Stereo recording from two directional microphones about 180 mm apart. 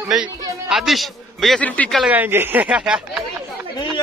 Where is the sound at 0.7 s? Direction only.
Centre (ahead or behind).